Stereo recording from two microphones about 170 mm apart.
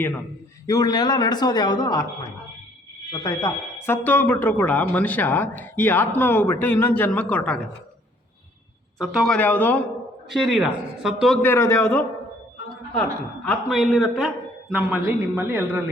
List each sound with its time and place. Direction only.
0.7 s speech: 20° left (ahead or behind)
3.1 s speech: 20° left (ahead or behind)
9.0 s speech: centre (ahead or behind)
10.2 s a man's voice: centre (ahead or behind)
11.4 s a man's voice: 15° left (ahead or behind); by 15.8 s 10° right (ahead or behind)